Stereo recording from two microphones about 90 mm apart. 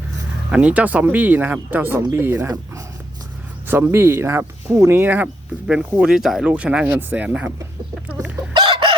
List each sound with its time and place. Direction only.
0.5 s speech: 15° right (ahead or behind)
3.7 s speech: 25° right (ahead or behind)
5.9 s speech: 10° right (ahead or behind)
8.5 s chicken: 70° right (ahead or behind)